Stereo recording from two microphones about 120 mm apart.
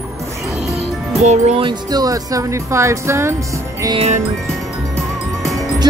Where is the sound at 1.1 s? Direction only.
70° right (ahead or behind).